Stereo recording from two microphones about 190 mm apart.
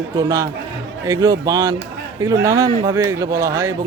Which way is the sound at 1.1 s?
20° right (ahead or behind).